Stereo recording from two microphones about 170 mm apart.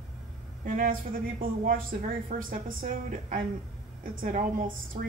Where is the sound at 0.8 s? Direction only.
55° right (ahead or behind).